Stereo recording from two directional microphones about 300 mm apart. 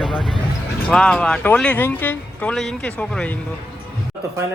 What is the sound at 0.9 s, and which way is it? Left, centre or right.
Speech, centre.